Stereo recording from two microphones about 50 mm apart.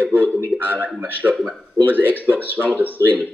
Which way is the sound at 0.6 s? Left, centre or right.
Right.